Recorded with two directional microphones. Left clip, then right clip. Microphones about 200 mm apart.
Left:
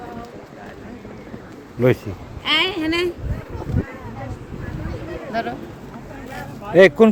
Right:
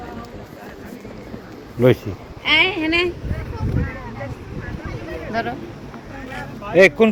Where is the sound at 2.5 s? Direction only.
50° left (ahead or behind).